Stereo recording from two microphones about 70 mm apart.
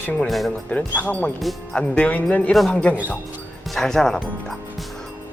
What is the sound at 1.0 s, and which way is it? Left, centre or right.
Speech, left.